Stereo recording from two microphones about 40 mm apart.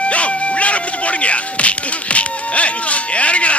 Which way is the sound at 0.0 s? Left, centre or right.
Left.